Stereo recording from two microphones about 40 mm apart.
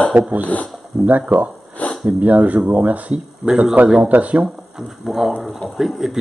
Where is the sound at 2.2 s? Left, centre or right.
Right.